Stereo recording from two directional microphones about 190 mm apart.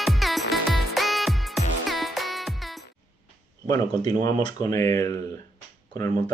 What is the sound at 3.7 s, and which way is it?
Speech, 20° left (ahead or behind).